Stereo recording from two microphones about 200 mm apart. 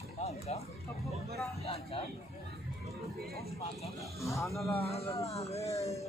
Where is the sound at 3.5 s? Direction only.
30° left (ahead or behind).